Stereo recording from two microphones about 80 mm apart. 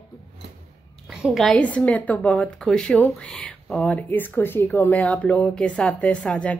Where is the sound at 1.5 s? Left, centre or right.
Centre.